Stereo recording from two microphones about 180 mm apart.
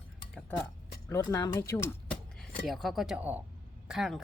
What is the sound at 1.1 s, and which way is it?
Speech, 15° left (ahead or behind).